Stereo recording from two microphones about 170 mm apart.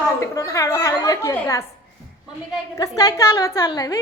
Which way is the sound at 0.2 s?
15° left (ahead or behind).